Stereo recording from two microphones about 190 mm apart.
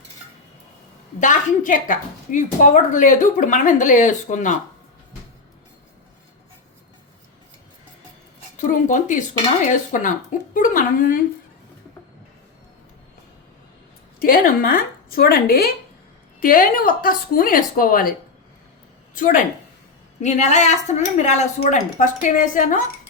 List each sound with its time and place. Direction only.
1.2 s a woman's voice: 40° left (ahead or behind)
8.5 s speech: 40° left (ahead or behind)
14.2 s speech: 50° left (ahead or behind)
19.1 s a woman's voice: 45° left (ahead or behind)